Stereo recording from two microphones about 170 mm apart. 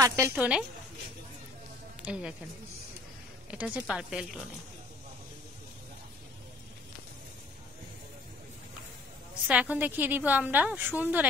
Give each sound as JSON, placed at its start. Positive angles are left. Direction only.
{"t": 0.0, "sound": "a woman's voice", "side_deg": -15}
{"t": 2.0, "sound": "a woman's voice", "side_deg": -5}
{"t": 3.4, "sound": "a woman's voice", "side_deg": -5}
{"t": 9.5, "sound": "a woman's voice", "side_deg": -10}